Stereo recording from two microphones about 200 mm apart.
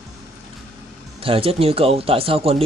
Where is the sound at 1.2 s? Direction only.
30° right (ahead or behind).